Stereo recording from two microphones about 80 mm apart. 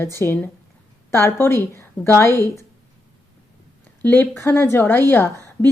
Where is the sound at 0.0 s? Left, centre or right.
Left.